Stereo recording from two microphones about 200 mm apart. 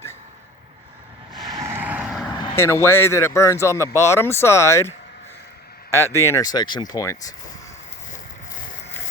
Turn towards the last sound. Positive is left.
turn(degrees=15)  # may be behind; listen again after turning